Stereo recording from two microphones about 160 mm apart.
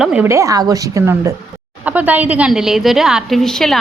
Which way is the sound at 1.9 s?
10° right (ahead or behind).